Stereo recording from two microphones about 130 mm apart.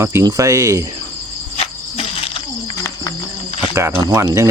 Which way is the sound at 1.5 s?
50° left (ahead or behind).